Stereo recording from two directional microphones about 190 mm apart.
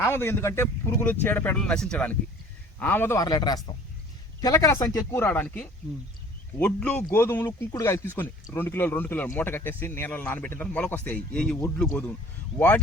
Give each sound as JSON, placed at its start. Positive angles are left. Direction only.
{"t": 0.0, "sound": "a man's voice", "side_deg": 10}